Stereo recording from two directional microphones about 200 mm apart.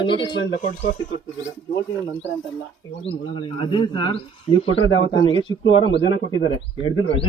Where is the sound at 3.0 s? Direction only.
25° left (ahead or behind).